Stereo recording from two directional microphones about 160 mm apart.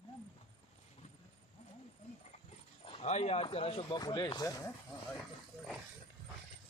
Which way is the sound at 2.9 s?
45° left (ahead or behind).